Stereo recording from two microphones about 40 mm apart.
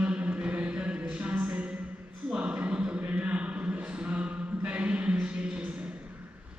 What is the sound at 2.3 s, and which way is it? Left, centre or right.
A man's voice, right.